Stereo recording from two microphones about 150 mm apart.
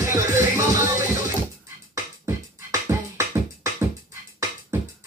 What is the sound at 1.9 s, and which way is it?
Beatboxing, 25° right (ahead or behind).